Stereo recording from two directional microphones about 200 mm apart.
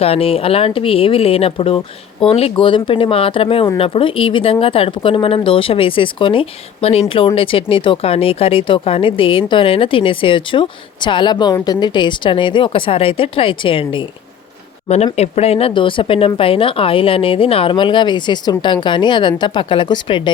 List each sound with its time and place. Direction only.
0.0 s speech: 30° left (ahead or behind)